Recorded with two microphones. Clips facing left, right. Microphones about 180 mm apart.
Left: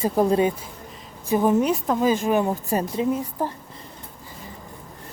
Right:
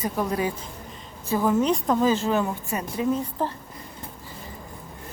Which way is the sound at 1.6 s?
5° left (ahead or behind).